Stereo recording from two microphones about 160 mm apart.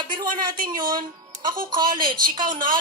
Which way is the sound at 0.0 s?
30° right (ahead or behind).